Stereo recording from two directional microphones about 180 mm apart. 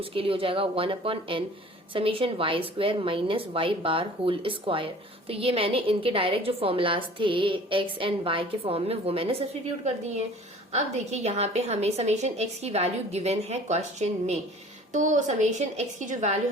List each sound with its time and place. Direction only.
0.0 s a woman's voice: 30° right (ahead or behind)
10.7 s a woman's voice: 40° right (ahead or behind)